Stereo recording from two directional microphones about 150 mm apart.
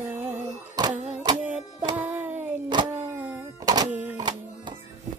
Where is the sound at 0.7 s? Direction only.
25° right (ahead or behind).